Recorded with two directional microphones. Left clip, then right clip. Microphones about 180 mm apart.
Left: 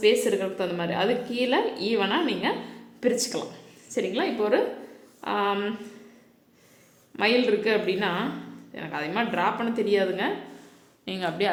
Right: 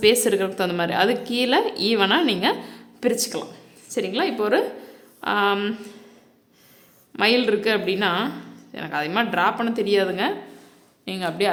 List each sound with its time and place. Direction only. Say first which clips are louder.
0.0 s a woman's voice: right 4 dB; 30° right (ahead or behind)
3.0 s speech: right 2 dB; 20° right (ahead or behind)
7.2 s a woman's voice: right 3 dB; 25° right (ahead or behind)